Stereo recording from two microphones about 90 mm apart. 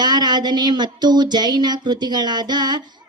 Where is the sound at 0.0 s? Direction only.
50° right (ahead or behind).